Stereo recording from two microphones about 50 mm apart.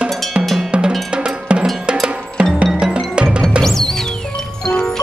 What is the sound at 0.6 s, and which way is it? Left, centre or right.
Cowbell, centre.